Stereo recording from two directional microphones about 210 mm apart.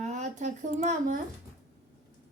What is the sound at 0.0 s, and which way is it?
Speech, 35° right (ahead or behind).